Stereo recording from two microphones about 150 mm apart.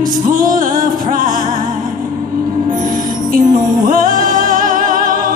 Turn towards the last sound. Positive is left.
turn(degrees=-65)  # may be behind; listen again after turning